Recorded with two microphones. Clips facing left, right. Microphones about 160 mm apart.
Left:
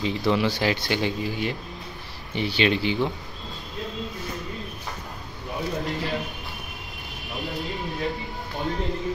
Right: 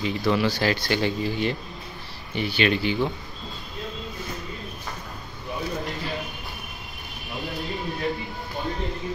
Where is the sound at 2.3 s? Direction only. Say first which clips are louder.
Even; 25° left (ahead or behind).